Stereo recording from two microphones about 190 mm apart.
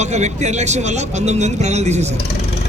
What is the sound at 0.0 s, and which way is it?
A man's voice, 35° right (ahead or behind).